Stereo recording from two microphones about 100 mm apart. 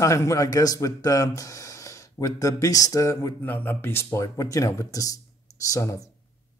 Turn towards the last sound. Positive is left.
turn(degrees=35)  # may be behind; listen again after turning